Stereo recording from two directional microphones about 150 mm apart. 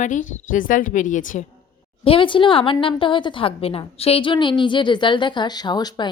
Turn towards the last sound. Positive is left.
turn(degrees=30)  # may be behind; listen again after turning